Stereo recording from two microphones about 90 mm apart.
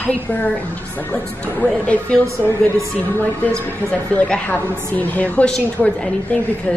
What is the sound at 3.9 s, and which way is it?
A woman's voice, 15° left (ahead or behind).